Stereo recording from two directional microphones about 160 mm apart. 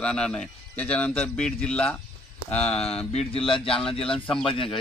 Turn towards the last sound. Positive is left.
turn(degrees=35)  # may be behind; listen again after turning